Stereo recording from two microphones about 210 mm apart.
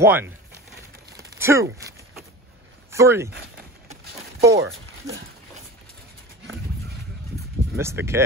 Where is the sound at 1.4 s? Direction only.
15° right (ahead or behind).